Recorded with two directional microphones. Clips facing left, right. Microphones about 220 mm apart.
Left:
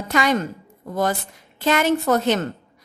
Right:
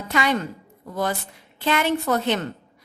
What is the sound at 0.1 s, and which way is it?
Speech, 45° left (ahead or behind).